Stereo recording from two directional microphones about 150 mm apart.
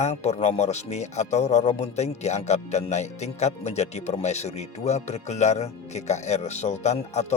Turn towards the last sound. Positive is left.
turn(degrees=50)  # may be behind; listen again after turning